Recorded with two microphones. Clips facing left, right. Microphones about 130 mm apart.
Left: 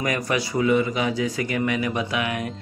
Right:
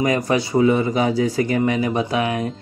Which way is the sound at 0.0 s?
25° right (ahead or behind).